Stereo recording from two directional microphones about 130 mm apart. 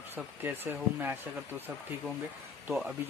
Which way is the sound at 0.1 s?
20° right (ahead or behind).